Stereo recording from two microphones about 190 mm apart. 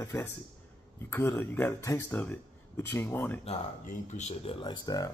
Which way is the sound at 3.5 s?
40° left (ahead or behind).